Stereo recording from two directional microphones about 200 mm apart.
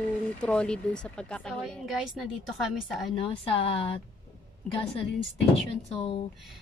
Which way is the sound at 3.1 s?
25° left (ahead or behind).